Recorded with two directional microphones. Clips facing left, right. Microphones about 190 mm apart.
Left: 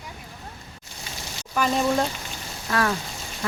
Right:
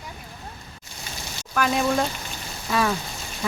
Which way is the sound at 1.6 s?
5° right (ahead or behind).